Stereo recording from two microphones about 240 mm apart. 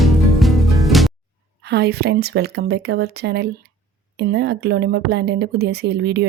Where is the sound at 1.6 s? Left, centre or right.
Right.